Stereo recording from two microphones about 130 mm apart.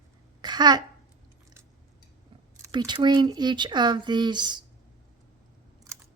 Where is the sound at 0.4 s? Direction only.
35° right (ahead or behind).